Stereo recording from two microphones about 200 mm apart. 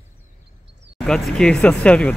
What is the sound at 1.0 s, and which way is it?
Speech, 5° left (ahead or behind).